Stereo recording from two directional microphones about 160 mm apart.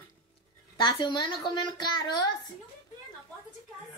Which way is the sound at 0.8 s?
30° left (ahead or behind).